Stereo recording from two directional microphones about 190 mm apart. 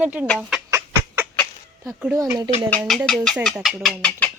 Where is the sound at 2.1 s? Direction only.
15° right (ahead or behind).